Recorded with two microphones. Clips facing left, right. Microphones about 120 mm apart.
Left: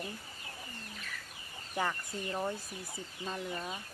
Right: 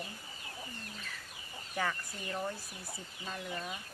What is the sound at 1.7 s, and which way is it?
Speech, 15° left (ahead or behind).